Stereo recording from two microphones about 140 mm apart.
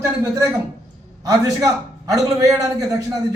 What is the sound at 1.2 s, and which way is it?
A man's voice, 25° right (ahead or behind).